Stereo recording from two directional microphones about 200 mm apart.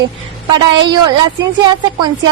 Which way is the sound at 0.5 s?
20° right (ahead or behind).